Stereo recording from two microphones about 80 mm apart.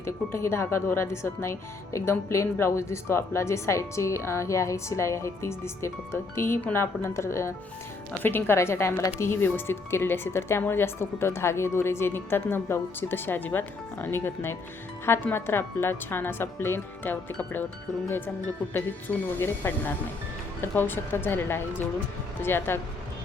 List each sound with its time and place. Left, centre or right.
0.0 s speech: left
18.7 s speech: left